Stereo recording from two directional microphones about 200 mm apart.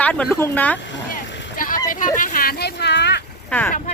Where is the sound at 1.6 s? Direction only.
45° left (ahead or behind).